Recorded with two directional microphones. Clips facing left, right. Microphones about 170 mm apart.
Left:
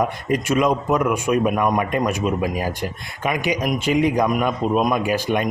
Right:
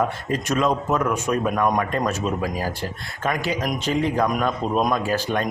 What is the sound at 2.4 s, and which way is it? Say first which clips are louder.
A man's voice: left 3 dB; 20° left (ahead or behind).